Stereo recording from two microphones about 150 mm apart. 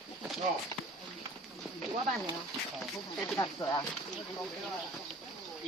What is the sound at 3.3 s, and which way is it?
Speech, 25° left (ahead or behind).